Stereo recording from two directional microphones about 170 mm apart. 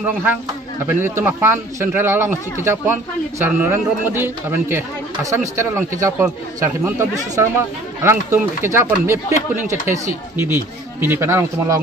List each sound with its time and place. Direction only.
0.0 s speech: 10° right (ahead or behind)